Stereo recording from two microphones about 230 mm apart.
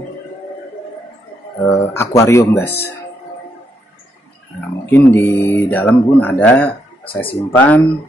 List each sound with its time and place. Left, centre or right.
1.7 s speech: centre
4.6 s speech: centre
7.1 s speech: left
7.3 s speech: centre